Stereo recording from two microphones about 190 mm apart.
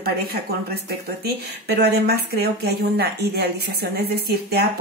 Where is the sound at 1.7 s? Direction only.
60° right (ahead or behind).